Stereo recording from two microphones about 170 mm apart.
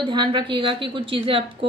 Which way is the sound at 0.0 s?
25° right (ahead or behind).